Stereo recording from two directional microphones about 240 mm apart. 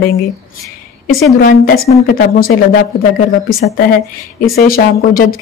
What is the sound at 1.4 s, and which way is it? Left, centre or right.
Speech, left.